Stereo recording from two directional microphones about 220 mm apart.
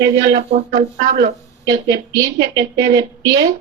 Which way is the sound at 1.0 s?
45° right (ahead or behind).